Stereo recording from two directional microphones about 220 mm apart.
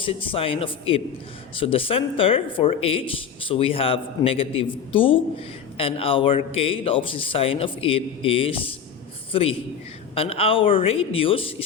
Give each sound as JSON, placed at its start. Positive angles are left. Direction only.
{"t": 0.0, "sound": "speech", "side_deg": 25}